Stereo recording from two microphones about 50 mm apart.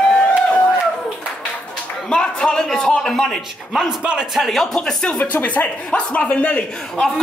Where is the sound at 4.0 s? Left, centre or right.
Centre.